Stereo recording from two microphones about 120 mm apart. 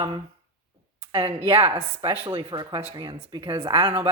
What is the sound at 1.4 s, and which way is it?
Speech, 50° right (ahead or behind).